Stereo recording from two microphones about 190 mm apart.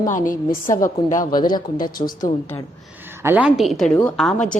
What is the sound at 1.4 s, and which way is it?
Speech, 20° left (ahead or behind).